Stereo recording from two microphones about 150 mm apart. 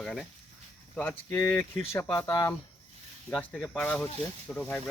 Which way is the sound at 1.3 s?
20° left (ahead or behind).